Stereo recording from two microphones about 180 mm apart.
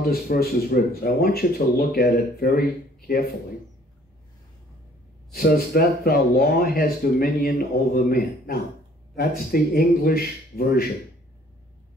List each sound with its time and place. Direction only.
0.0 s speech: 55° left (ahead or behind)
5.3 s speech: 55° left (ahead or behind)